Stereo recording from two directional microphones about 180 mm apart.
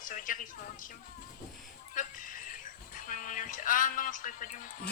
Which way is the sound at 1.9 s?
50° left (ahead or behind).